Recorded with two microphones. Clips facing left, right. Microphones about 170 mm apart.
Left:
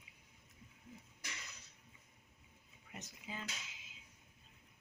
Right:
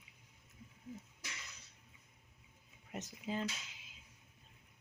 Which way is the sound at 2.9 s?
40° right (ahead or behind).